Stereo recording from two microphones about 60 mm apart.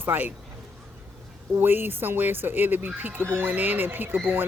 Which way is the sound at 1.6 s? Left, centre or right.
Right.